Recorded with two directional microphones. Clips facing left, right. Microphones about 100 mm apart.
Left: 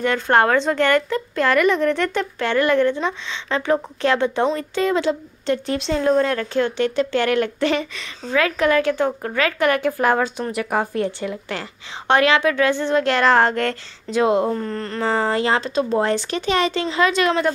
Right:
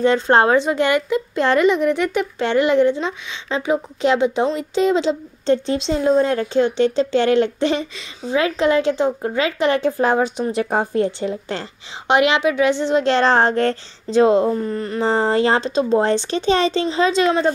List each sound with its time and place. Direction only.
0.0 s speech: 20° right (ahead or behind)
12.1 s speech: 20° right (ahead or behind)
14.5 s speech: 10° right (ahead or behind)
15.0 s speech: 30° right (ahead or behind)